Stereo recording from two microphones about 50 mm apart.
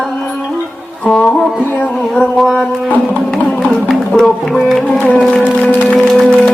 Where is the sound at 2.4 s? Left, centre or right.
Centre.